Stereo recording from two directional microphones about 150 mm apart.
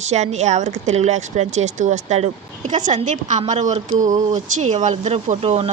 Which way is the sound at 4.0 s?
55° right (ahead or behind).